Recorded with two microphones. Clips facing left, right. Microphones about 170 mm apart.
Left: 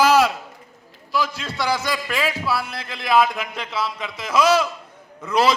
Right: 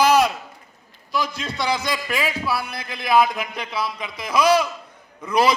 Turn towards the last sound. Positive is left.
turn(degrees=-15)  # may be behind; listen again after turning